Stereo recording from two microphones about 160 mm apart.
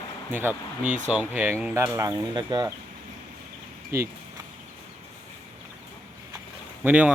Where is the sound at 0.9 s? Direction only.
50° right (ahead or behind).